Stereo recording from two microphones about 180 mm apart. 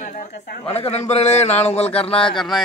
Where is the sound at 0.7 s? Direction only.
35° left (ahead or behind).